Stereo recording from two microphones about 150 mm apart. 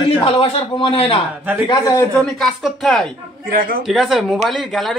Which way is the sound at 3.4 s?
75° right (ahead or behind).